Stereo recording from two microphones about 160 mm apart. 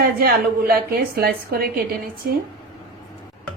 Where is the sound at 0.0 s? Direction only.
70° right (ahead or behind).